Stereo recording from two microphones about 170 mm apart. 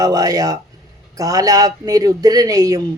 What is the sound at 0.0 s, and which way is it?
A man's voice, 20° right (ahead or behind).